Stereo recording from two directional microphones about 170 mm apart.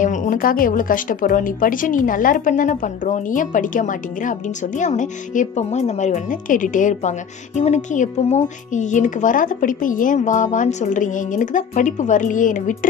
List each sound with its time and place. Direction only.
0.0 s speech: 50° left (ahead or behind)